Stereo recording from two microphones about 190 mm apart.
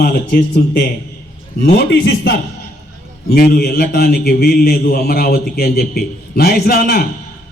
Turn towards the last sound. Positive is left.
turn(degrees=50)  # may be behind; listen again after turning